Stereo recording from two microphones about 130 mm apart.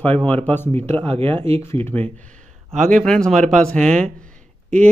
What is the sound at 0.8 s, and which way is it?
Speech, 50° right (ahead or behind).